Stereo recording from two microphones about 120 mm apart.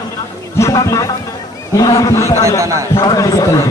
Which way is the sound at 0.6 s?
30° left (ahead or behind).